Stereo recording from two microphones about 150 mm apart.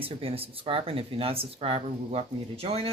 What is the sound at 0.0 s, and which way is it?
Speech, 40° right (ahead or behind).